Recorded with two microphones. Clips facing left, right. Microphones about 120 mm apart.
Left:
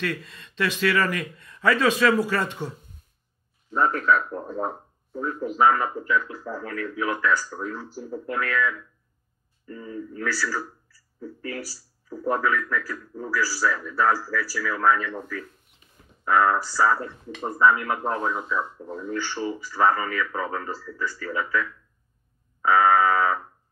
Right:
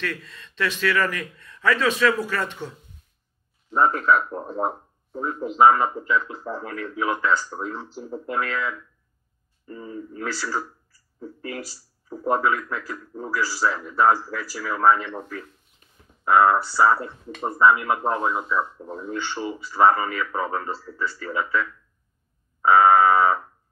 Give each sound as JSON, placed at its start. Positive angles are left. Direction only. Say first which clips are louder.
{"t": 0.0, "sound": "speech", "louder": "left 2 dB", "side_deg": 15}
{"t": 3.7, "sound": "speech", "louder": "right 2 dB", "side_deg": -30}
{"t": 22.6, "sound": "fire alarm", "louder": "right 3 dB", "side_deg": -25}